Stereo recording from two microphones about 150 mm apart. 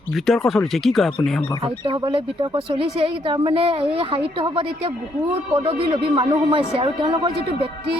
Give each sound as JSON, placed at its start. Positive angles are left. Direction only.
{"t": 0.3, "sound": "speech", "side_deg": 0}
{"t": 1.6, "sound": "speech", "side_deg": -30}